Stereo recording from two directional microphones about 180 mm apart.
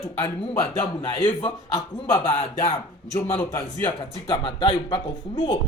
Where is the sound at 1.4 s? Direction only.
30° left (ahead or behind).